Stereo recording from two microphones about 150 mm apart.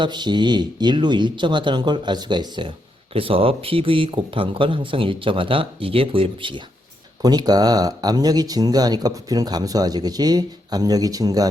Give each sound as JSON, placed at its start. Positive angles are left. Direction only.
{"t": 0.0, "sound": "speech", "side_deg": -30}